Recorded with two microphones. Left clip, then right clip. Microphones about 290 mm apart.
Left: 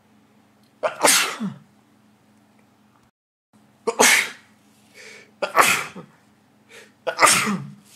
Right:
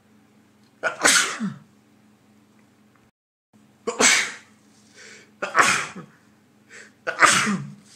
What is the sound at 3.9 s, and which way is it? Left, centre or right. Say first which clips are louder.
Sneeze: left 2 dB; centre.